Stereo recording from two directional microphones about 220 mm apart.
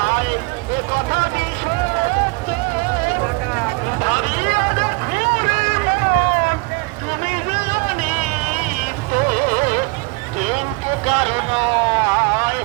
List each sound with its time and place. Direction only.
0.0 s vehicle: 55° right (ahead or behind)
2.5 s music: 40° right (ahead or behind)
4.0 s a sound: 35° right (ahead or behind)
9.1 s music: 40° right (ahead or behind)
11.0 s vehicle: 30° right (ahead or behind)